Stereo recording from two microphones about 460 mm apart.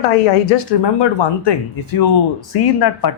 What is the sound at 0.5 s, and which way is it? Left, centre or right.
Speech, left.